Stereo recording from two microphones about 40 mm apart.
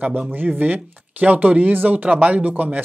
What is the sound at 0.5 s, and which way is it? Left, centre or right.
Speech, right.